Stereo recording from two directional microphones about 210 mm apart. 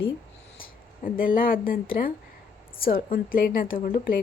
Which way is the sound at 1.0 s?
40° left (ahead or behind).